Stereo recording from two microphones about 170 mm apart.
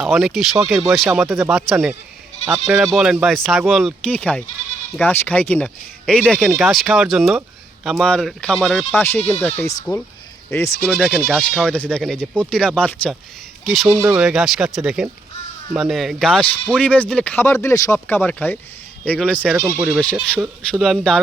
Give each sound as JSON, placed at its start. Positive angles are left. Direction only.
{"t": 0.0, "sound": "speech", "side_deg": 0}
{"t": 10.8, "sound": "speech", "side_deg": 5}
{"t": 13.7, "sound": "speech", "side_deg": -5}
{"t": 19.5, "sound": "speech", "side_deg": -10}
{"t": 20.7, "sound": "speech", "side_deg": 0}